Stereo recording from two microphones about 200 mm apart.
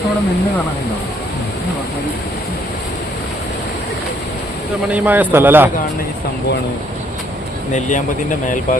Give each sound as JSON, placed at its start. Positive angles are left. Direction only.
{"t": 4.9, "sound": "a man's voice", "side_deg": -10}
{"t": 7.7, "sound": "speech", "side_deg": 40}